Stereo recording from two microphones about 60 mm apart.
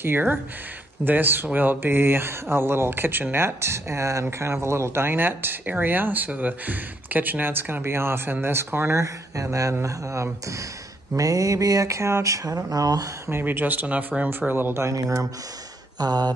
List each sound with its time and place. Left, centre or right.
0.0 s speech: right
9.0 s speech: right
11.1 s speech: right
13.3 s speech: right
14.5 s speech: right
14.8 s speech: right
16.0 s a sound: right